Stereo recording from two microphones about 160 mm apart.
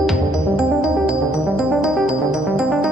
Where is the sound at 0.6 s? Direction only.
5° right (ahead or behind).